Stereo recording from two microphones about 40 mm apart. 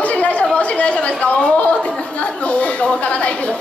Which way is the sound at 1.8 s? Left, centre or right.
Left.